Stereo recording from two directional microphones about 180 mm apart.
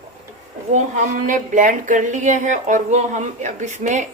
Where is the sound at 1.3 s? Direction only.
45° right (ahead or behind).